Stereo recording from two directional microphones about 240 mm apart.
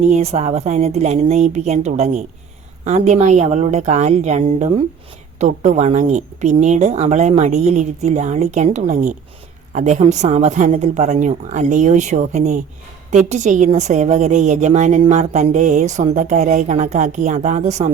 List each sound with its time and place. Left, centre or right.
0.1 s a woman's voice: right